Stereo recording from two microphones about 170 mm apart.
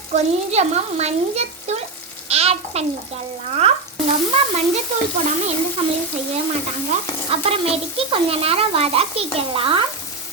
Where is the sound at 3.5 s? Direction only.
35° right (ahead or behind).